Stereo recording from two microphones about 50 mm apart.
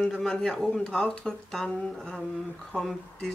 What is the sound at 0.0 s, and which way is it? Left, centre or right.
Speech, centre.